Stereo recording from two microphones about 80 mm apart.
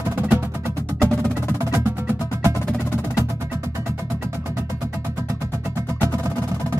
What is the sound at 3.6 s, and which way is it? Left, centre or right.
Music, right.